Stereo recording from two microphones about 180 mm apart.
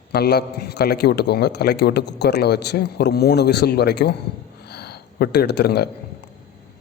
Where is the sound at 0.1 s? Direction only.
65° left (ahead or behind).